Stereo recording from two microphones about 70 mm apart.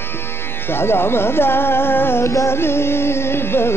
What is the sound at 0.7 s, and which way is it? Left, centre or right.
Music, left.